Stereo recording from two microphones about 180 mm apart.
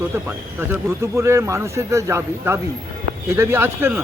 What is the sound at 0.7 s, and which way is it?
Speech, 15° right (ahead or behind).